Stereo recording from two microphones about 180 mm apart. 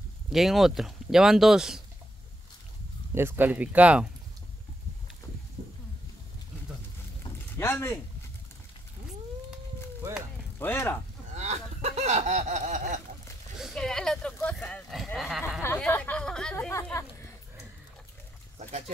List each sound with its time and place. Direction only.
0.3 s speech: centre (ahead or behind)
3.2 s speech: 10° right (ahead or behind)
7.2 s boat: 15° left (ahead or behind)
10.6 s speech: 10° left (ahead or behind)
11.3 s a sound: 40° right (ahead or behind)
13.6 s a sound: centre (ahead or behind)
15.1 s a sound: centre (ahead or behind)
15.6 s chatter: 10° left (ahead or behind)
16.5 s speech: 15° left (ahead or behind)